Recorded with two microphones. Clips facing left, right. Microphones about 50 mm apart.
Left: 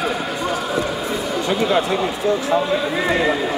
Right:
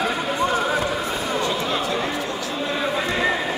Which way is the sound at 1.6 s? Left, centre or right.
Left.